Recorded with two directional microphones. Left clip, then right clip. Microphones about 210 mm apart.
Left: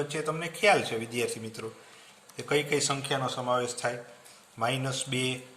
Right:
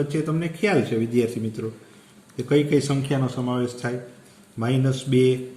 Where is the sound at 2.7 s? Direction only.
30° left (ahead or behind).